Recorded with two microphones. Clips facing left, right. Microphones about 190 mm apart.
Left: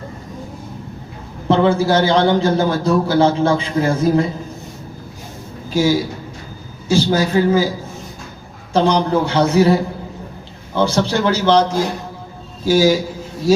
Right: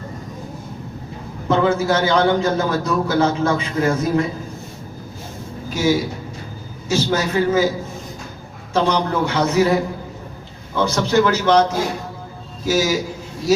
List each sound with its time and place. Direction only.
1.5 s a man's voice: 30° left (ahead or behind)
6.8 s a man's voice: 30° left (ahead or behind)
8.7 s a man's voice: 30° left (ahead or behind)
10.8 s a man's voice: 30° left (ahead or behind)